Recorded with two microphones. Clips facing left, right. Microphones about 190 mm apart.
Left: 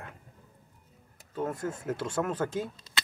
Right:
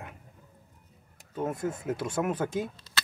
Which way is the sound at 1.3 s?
15° right (ahead or behind).